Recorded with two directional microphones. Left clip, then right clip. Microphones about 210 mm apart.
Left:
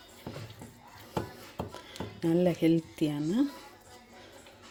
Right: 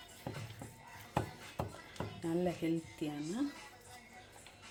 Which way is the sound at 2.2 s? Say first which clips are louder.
Left 10 dB; 45° left (ahead or behind).